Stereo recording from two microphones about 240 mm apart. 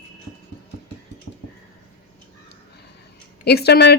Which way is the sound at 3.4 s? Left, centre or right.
Left.